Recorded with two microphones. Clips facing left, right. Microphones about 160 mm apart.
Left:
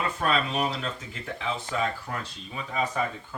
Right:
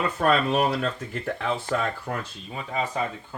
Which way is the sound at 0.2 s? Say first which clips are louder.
Right 6 dB; 55° right (ahead or behind).